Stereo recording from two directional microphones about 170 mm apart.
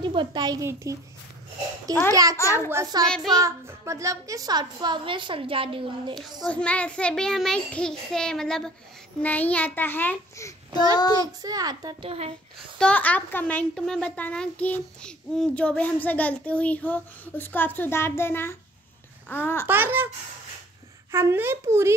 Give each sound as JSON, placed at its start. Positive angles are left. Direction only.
{"t": 0.0, "sound": "a woman's voice", "side_deg": -30}
{"t": 2.3, "sound": "a child's voice", "side_deg": 15}
{"t": 2.7, "sound": "a woman's voice", "side_deg": -20}
{"t": 3.1, "sound": "a child's voice", "side_deg": 0}
{"t": 3.3, "sound": "a woman's voice", "side_deg": -15}
{"t": 6.4, "sound": "a child's voice", "side_deg": 5}
{"t": 11.4, "sound": "a woman's voice", "side_deg": -20}
{"t": 12.7, "sound": "a child's voice", "side_deg": 5}
{"t": 19.7, "sound": "a child's voice", "side_deg": -10}
{"t": 21.1, "sound": "a child's voice", "side_deg": -15}